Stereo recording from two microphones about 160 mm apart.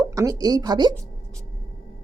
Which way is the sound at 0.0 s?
20° right (ahead or behind).